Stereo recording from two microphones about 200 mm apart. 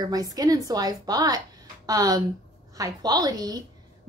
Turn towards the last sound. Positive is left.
turn(degrees=-20)  # may be behind; listen again after turning